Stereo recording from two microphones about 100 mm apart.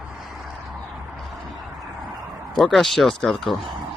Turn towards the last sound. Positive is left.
turn(degrees=5)  # may be behind; listen again after turning